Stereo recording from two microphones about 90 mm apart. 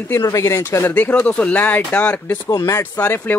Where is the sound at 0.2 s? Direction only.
35° left (ahead or behind).